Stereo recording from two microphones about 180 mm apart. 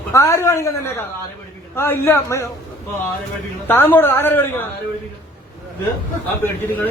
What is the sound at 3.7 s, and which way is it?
Speech, 10° left (ahead or behind).